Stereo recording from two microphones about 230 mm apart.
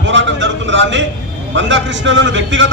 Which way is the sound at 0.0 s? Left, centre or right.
Right.